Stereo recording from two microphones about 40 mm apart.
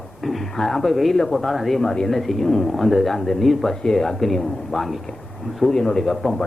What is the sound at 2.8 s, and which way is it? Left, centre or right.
Speech, centre.